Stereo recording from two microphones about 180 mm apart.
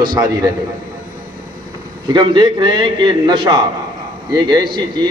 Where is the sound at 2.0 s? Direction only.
25° right (ahead or behind).